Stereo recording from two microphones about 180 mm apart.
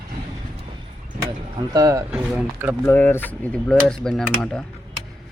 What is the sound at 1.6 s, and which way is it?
Speech, 20° right (ahead or behind).